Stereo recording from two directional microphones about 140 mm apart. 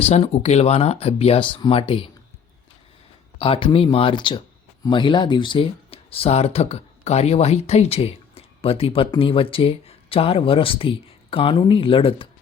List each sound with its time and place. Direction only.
0.1 s speech: 50° left (ahead or behind)
3.3 s speech: 40° left (ahead or behind)